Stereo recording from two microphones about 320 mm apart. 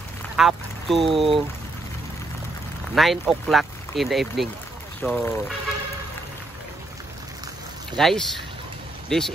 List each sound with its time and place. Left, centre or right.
0.4 s speech: centre
1.1 s speech: centre
2.9 s speech: centre
8.0 s speech: centre